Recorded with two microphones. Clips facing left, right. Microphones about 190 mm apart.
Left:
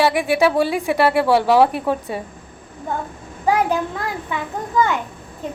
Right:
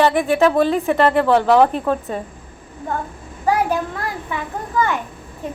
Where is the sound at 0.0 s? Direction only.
10° left (ahead or behind).